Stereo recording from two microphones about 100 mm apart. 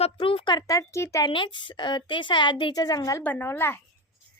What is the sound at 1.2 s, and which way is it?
A child's voice, 55° left (ahead or behind).